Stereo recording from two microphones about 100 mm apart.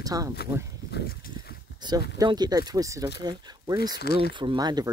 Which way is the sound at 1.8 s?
40° right (ahead or behind).